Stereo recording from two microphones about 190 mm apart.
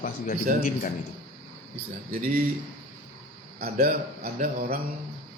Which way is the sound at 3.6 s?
45° right (ahead or behind).